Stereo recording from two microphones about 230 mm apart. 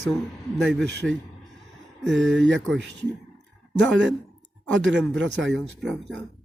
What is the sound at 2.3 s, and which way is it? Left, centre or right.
Speech, right.